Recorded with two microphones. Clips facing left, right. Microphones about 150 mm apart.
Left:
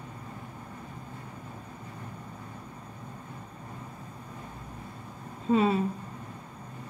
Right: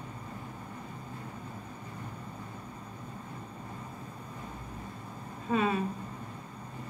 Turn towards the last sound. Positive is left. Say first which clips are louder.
# left 5 dB
turn(degrees=25)  # may be behind; listen again after turning